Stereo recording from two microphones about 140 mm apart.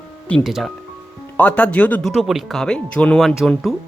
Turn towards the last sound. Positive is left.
turn(degrees=0)  # may be behind; listen again after turning